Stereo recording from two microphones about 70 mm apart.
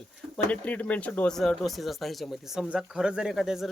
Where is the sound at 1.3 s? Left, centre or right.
Centre.